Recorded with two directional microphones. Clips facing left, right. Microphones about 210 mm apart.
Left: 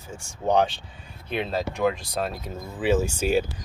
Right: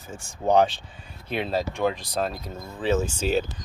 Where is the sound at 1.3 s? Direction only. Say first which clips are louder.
Right 1 dB; 30° right (ahead or behind).